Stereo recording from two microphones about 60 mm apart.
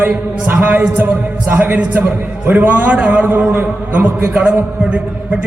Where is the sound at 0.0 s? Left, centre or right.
Right.